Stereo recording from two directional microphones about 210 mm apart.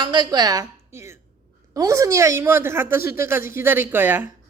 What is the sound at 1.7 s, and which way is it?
A woman's voice, 15° right (ahead or behind).